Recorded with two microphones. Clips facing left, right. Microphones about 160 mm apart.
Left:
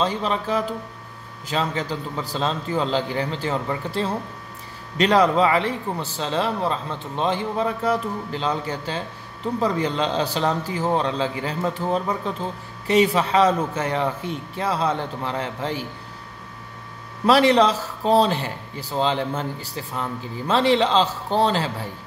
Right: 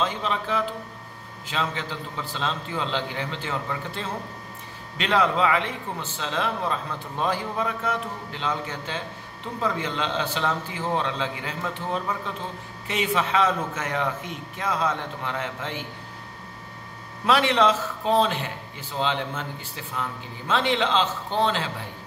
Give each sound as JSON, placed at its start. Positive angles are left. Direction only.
{"t": 0.0, "sound": "a man's voice", "side_deg": 35}
{"t": 17.3, "sound": "a man's voice", "side_deg": 35}